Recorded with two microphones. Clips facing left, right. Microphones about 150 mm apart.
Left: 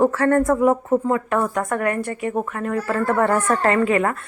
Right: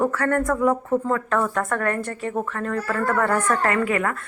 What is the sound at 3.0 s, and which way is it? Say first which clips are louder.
Speech: left 2 dB; 25° left (ahead or behind).